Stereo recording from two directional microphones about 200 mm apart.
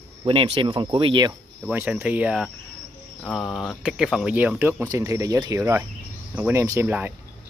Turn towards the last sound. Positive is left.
turn(degrees=-10)  # may be behind; listen again after turning